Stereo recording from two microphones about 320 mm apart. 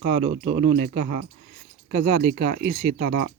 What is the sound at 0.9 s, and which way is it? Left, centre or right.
Speech, right.